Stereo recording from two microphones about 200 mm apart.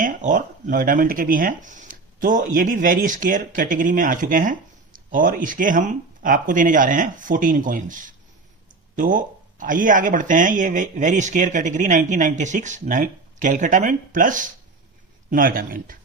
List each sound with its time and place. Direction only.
0.0 s a man's voice: 40° right (ahead or behind)